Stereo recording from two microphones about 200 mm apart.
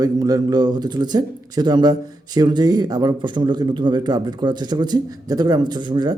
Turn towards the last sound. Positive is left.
turn(degrees=-20)  # may be behind; listen again after turning